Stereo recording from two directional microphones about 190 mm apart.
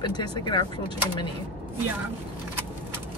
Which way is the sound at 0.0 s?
25° left (ahead or behind).